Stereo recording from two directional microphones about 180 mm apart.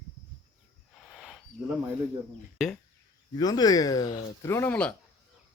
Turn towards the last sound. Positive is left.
turn(degrees=10)  # may be behind; listen again after turning